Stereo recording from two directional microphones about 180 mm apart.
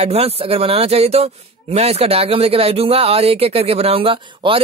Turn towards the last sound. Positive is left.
turn(degrees=-30)  # may be behind; listen again after turning